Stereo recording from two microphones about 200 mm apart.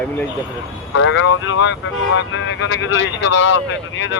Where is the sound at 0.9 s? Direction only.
70° left (ahead or behind).